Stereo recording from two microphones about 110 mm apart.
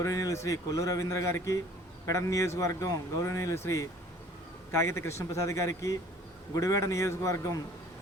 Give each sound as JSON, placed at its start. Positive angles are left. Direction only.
{"t": 0.0, "sound": "speech", "side_deg": 30}